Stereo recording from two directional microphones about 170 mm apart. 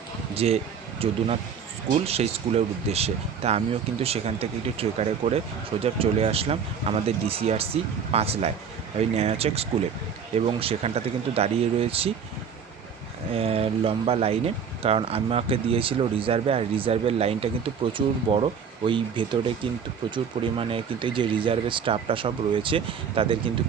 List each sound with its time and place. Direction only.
0.3 s speech: 35° right (ahead or behind)
13.3 s speech: 35° right (ahead or behind)